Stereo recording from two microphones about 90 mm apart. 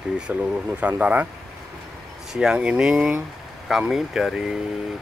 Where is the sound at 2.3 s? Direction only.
10° right (ahead or behind).